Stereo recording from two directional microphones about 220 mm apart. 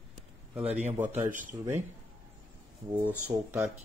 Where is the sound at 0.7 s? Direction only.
30° right (ahead or behind).